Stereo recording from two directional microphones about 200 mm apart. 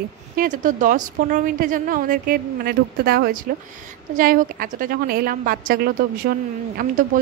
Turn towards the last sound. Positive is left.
turn(degrees=-45)  # may be behind; listen again after turning